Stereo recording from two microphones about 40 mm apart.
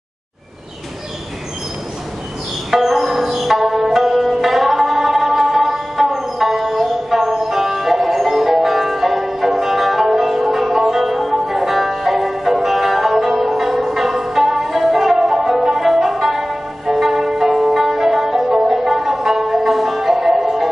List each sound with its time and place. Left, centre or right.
2.7 s music: centre
18.5 s music: centre
18.8 s music: centre